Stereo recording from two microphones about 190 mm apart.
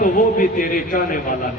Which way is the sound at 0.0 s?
45° left (ahead or behind).